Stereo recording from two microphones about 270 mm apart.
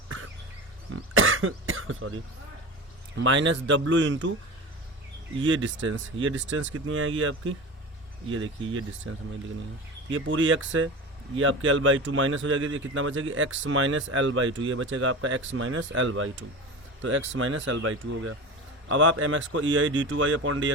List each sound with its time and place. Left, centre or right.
0.9 s cough: right
3.2 s speech: right
5.5 s speech: right
9.1 s speech: right